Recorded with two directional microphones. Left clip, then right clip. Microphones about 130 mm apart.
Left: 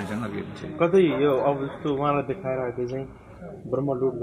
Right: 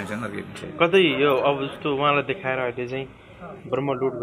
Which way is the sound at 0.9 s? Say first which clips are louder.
Right 1 dB; 30° right (ahead or behind).